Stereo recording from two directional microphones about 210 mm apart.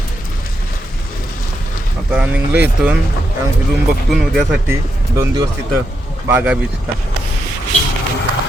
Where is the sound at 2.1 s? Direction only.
5° right (ahead or behind).